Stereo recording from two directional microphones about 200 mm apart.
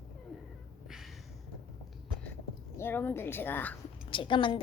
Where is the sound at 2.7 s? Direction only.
10° left (ahead or behind).